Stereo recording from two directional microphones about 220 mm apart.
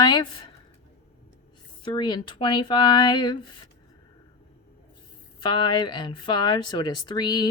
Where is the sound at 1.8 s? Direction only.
20° left (ahead or behind).